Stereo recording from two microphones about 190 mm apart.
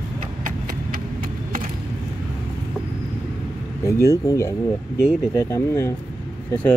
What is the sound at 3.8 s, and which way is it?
Speech, 15° left (ahead or behind).